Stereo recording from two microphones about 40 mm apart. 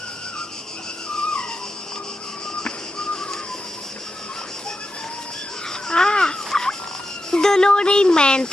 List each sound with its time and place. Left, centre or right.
2.6 s music: left
5.9 s turkey: centre
7.2 s speech: centre